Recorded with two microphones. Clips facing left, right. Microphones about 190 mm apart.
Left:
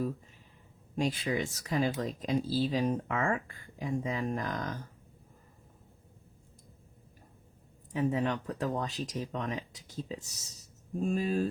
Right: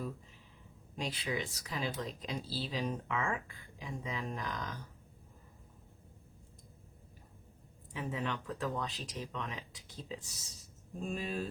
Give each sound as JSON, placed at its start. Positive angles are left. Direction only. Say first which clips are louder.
{"t": 0.9, "sound": "speech", "louder": "left 7 dB", "side_deg": 45}
{"t": 7.9, "sound": "speech", "louder": "left 8 dB", "side_deg": 40}